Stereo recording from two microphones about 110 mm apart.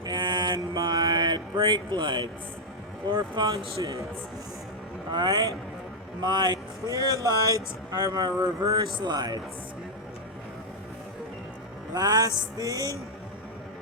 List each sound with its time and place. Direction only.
0.0 s mantra: 45° right (ahead or behind)
3.1 s speech: 45° right (ahead or behind)
3.8 s a man's voice: 30° right (ahead or behind)
5.1 s speech: 40° right (ahead or behind)
11.9 s speech: 40° right (ahead or behind)